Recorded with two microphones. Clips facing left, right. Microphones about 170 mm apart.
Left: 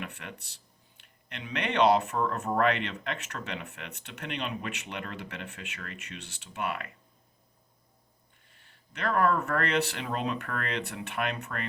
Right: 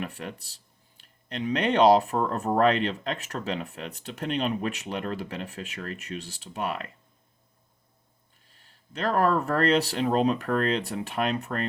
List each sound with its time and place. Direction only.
0.0 s speech: 35° right (ahead or behind)
9.0 s speech: 35° right (ahead or behind)